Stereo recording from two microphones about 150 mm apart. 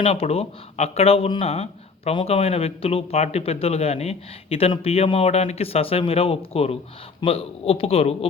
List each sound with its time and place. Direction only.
0.0 s speech: 40° left (ahead or behind)